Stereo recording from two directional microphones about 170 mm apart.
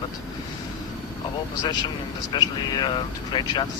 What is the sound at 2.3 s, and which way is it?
Speech, 25° left (ahead or behind).